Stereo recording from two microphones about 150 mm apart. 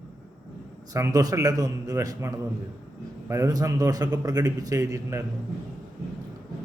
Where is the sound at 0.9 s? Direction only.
25° right (ahead or behind).